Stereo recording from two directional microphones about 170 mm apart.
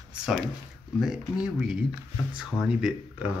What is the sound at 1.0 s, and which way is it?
Speech, 5° right (ahead or behind).